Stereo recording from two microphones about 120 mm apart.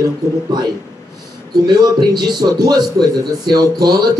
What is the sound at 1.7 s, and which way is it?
Speech, 35° right (ahead or behind).